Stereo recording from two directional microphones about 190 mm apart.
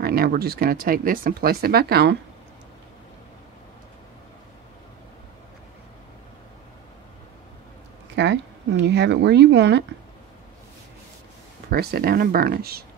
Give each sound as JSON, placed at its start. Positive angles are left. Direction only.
{"t": 0.0, "sound": "speech", "side_deg": -50}
{"t": 8.2, "sound": "speech", "side_deg": -70}
{"t": 11.7, "sound": "speech", "side_deg": -50}